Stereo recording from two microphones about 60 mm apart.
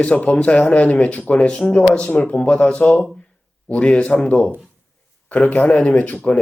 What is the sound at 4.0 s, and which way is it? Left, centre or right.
Speech, left.